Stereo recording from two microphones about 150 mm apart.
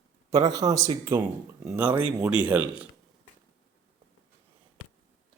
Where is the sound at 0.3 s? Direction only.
25° right (ahead or behind).